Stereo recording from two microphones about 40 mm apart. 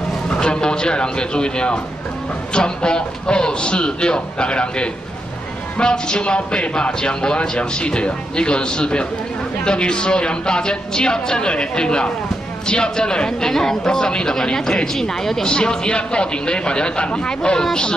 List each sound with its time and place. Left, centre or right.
0.3 s speech: left
15.4 s speech: left